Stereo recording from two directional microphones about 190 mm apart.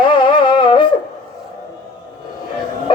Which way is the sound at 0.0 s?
25° left (ahead or behind).